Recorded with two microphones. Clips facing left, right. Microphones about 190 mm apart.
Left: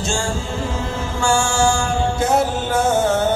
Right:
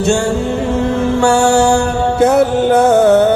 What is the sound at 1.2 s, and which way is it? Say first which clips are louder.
Mantra: right 6 dB; 65° right (ahead or behind).